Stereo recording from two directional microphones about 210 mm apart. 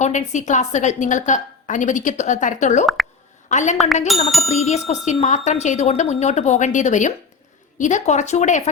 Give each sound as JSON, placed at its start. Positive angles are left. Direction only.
{"t": 0.0, "sound": "a woman's voice", "side_deg": 35}
{"t": 4.1, "sound": "bicycle bell", "side_deg": 0}
{"t": 4.6, "sound": "a woman's voice", "side_deg": 30}